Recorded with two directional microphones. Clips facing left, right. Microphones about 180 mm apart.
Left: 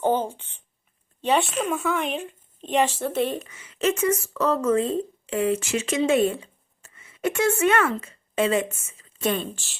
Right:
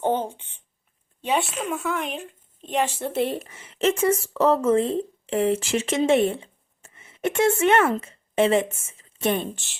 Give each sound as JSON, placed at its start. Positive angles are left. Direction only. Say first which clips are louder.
{"t": 1.2, "sound": "speech", "louder": "left 2 dB", "side_deg": -10}
{"t": 3.1, "sound": "a woman's voice", "louder": "even", "side_deg": -30}